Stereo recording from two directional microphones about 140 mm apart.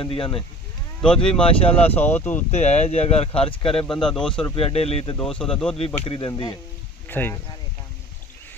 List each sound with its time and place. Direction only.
0.0 s speech: 40° left (ahead or behind)
2.0 s speech: 15° left (ahead or behind)
2.5 s speech: 50° left (ahead or behind)
3.8 s speech: 5° left (ahead or behind)
4.6 s speech: 45° left (ahead or behind)
5.2 s speech: 5° left (ahead or behind)
5.8 s speech: 40° left (ahead or behind)
7.1 s speech: 15° left (ahead or behind)